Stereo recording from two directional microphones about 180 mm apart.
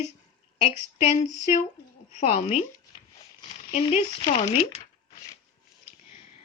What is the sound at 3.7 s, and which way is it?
A woman's voice, 40° left (ahead or behind).